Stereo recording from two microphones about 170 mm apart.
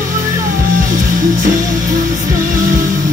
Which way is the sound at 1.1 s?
50° right (ahead or behind).